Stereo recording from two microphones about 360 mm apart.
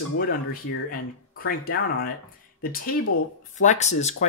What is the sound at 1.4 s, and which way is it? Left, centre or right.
Speech, left.